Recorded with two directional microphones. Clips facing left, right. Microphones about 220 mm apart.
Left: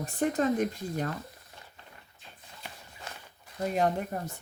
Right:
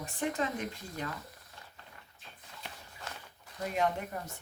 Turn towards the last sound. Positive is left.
turn(degrees=35)  # may be behind; listen again after turning